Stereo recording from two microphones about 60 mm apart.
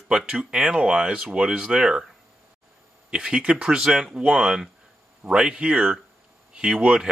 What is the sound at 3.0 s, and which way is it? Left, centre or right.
Speech, centre.